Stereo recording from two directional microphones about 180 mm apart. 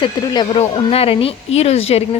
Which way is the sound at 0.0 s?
30° left (ahead or behind).